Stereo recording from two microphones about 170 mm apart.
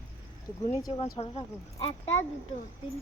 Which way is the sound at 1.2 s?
30° left (ahead or behind).